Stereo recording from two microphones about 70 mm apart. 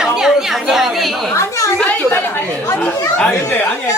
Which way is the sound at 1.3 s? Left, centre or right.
Left.